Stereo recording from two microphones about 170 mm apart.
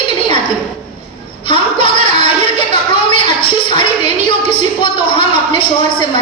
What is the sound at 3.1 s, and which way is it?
Music, 30° left (ahead or behind).